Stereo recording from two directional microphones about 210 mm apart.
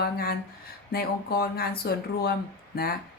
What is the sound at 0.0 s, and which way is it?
Speech, 45° left (ahead or behind).